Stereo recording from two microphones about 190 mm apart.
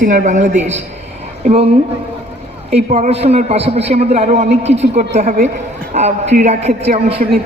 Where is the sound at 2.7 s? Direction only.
35° right (ahead or behind).